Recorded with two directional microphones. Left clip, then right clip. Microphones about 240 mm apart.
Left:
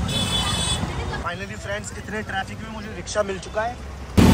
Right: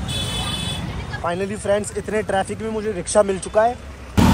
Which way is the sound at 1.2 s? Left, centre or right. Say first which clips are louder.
Right 7 dB; centre.